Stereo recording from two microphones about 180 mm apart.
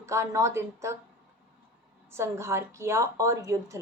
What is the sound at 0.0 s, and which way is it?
Speech, 15° right (ahead or behind).